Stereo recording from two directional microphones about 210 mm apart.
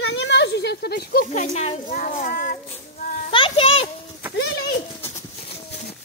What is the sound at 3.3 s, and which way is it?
Speech, 25° left (ahead or behind).